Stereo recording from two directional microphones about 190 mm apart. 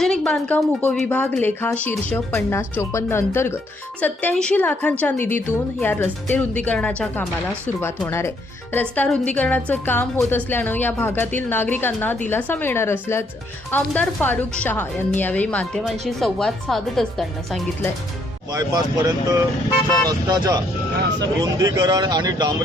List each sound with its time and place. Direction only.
0.0 s a woman's voice: 5° left (ahead or behind)
18.5 s speech: 20° right (ahead or behind)